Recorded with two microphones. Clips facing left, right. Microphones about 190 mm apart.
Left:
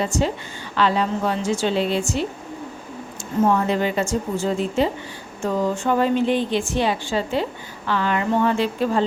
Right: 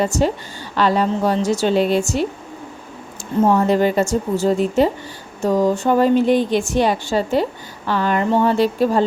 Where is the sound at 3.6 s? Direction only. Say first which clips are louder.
Right 5 dB; 45° right (ahead or behind).